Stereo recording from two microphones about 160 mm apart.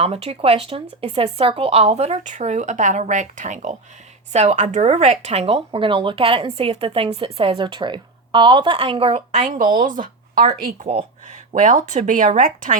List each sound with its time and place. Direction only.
0.0 s speech: 40° right (ahead or behind)